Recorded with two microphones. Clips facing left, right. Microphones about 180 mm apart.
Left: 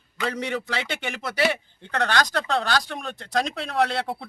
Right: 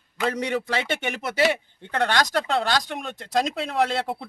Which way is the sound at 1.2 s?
25° right (ahead or behind).